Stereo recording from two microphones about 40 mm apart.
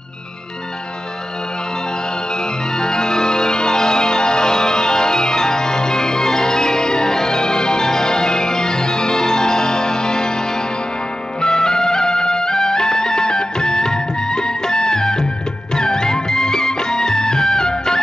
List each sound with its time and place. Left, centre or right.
2.7 s music: centre
11.4 s music: centre